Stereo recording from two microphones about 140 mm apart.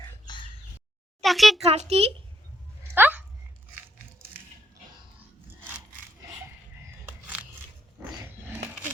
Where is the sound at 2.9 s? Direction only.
15° right (ahead or behind).